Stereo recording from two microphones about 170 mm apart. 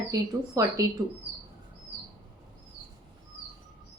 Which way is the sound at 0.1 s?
20° right (ahead or behind).